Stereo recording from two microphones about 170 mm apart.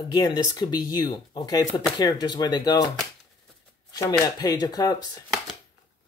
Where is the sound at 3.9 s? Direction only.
20° left (ahead or behind).